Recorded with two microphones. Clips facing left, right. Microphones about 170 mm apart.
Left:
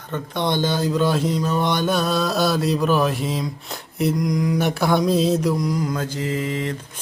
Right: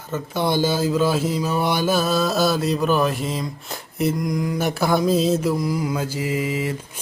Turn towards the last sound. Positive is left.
turn(degrees=-5)  # may be behind; listen again after turning